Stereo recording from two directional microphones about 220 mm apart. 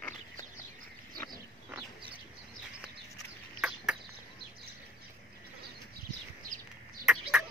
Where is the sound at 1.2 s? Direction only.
20° right (ahead or behind).